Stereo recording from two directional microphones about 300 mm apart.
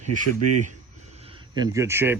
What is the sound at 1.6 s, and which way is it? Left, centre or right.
Speech, centre.